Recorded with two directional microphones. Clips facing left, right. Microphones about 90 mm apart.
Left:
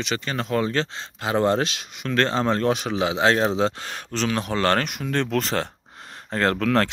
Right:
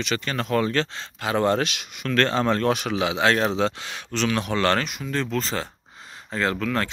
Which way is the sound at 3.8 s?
40° left (ahead or behind).